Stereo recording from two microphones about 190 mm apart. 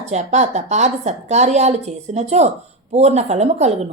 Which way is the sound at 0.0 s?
35° right (ahead or behind).